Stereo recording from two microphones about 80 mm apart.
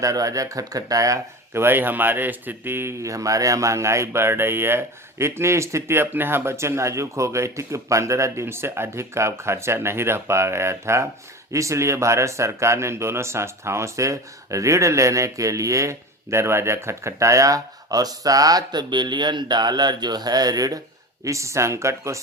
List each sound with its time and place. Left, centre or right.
0.0 s speech: right
1.5 s speech: right
21.2 s speech: right